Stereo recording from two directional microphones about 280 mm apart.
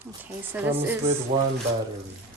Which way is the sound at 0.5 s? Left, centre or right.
Centre.